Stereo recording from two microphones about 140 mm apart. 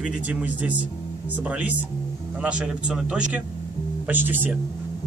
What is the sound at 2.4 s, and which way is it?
A man's voice, 10° right (ahead or behind).